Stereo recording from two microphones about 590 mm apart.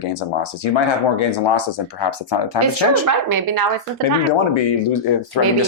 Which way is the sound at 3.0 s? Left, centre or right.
Right.